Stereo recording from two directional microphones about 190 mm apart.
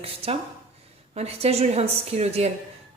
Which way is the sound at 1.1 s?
35° right (ahead or behind).